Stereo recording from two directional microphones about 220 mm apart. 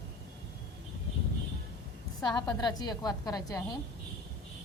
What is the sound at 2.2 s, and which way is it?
A woman's voice, 15° left (ahead or behind).